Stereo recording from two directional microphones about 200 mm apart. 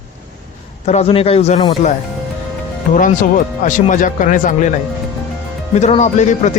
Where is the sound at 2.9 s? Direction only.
40° left (ahead or behind).